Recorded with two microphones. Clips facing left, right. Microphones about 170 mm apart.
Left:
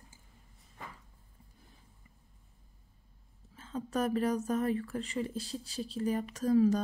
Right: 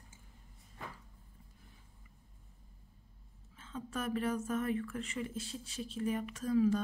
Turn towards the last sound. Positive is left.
turn(degrees=40)  # may be behind; listen again after turning